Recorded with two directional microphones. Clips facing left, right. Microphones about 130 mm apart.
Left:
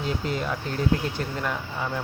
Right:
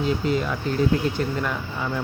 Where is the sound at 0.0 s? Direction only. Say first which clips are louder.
Right 5 dB; 45° left (ahead or behind).